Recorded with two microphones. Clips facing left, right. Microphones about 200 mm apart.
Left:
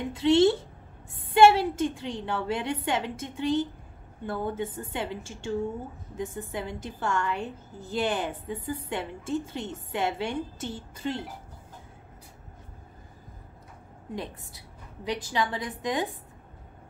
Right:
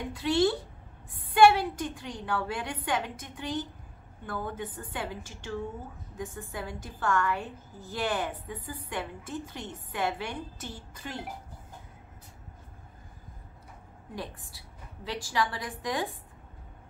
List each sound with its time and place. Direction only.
0.1 s a sound: 25° left (ahead or behind)
1.3 s a woman's voice: 25° left (ahead or behind)
14.1 s a woman's voice: 20° left (ahead or behind)